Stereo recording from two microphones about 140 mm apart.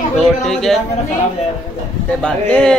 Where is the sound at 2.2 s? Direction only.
5° left (ahead or behind).